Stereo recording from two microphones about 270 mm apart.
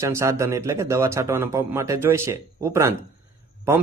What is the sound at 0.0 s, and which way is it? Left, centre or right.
Speech, centre.